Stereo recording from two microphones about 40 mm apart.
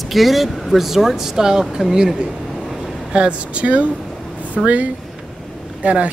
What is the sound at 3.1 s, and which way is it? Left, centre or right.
Speech, right.